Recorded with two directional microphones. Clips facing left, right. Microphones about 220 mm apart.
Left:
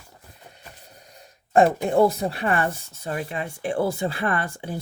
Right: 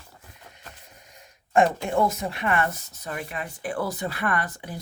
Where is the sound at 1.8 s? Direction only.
35° left (ahead or behind).